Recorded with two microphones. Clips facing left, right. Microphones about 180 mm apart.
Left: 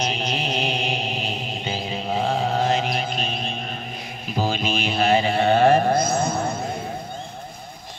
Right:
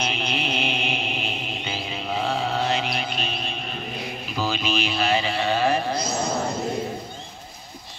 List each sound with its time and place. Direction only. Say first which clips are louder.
0.0 s music: left 2 dB; 40° left (ahead or behind)